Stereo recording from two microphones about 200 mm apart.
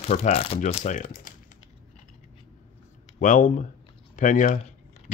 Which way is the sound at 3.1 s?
40° left (ahead or behind).